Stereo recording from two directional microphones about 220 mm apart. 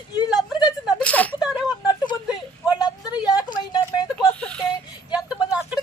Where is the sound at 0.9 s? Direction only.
5° left (ahead or behind).